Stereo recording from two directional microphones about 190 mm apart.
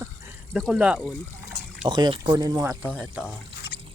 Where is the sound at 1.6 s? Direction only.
60° left (ahead or behind).